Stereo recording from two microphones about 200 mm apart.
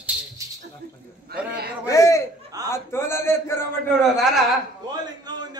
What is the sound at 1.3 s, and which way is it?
Speech, 50° right (ahead or behind).